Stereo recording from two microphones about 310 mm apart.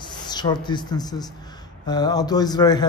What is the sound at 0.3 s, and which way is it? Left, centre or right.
A man's voice, centre.